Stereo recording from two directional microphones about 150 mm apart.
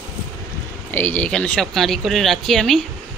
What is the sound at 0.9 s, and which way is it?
Speech, 10° left (ahead or behind).